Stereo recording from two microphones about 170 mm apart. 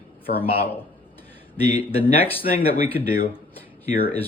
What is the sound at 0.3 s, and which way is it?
Speech, 60° left (ahead or behind).